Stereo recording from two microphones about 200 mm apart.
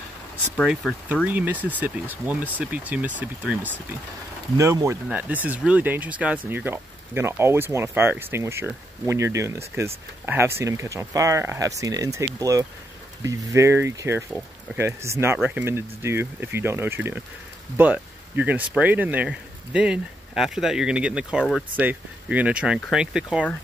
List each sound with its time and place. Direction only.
0.6 s speech: centre (ahead or behind)